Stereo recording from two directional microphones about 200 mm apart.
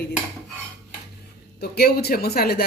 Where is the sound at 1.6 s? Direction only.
50° left (ahead or behind).